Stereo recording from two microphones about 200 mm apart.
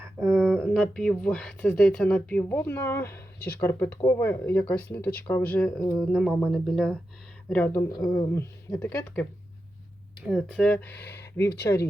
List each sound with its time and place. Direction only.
0.2 s speech: 15° right (ahead or behind)
0.4 s speech: 5° left (ahead or behind)
10.2 s speech: centre (ahead or behind)
11.3 s speech: 55° left (ahead or behind)